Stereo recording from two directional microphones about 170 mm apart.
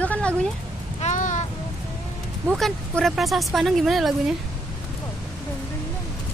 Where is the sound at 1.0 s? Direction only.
45° left (ahead or behind).